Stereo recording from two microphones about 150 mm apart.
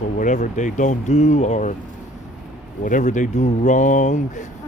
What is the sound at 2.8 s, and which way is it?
Speech, 60° left (ahead or behind).